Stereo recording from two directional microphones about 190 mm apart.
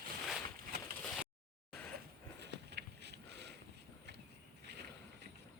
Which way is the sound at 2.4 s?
60° right (ahead or behind).